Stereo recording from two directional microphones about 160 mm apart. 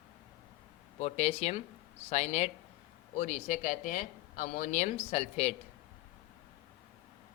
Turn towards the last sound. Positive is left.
turn(degrees=45)  # may be behind; listen again after turning